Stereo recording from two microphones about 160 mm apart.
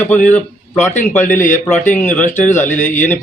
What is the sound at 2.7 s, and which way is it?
Speech, 50° left (ahead or behind).